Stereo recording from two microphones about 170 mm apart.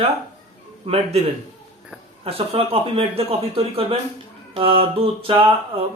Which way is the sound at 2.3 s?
35° right (ahead or behind).